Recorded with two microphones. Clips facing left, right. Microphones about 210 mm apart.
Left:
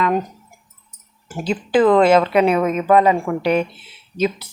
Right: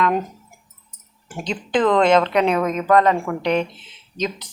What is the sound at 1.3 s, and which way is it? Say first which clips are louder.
Speech: left 4 dB; 5° left (ahead or behind).